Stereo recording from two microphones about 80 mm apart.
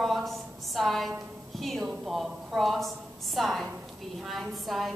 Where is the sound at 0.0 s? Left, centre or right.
Centre.